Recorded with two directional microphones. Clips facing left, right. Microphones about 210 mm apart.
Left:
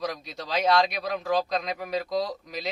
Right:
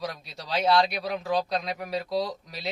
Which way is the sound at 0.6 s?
Centre (ahead or behind).